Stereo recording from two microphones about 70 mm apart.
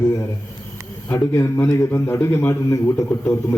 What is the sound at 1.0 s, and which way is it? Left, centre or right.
Speech, left.